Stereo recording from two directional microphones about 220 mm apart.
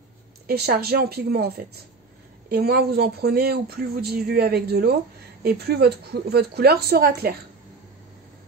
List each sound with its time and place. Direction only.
0.5 s speech: 45° right (ahead or behind)
2.5 s speech: 45° right (ahead or behind)